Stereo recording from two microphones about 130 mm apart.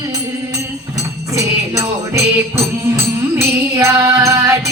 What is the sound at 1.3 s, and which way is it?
Music, 25° right (ahead or behind).